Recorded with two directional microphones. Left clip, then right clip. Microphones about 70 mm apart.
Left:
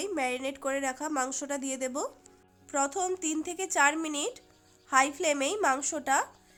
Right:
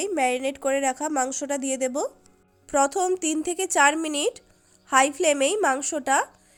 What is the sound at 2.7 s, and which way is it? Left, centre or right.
Speech, right.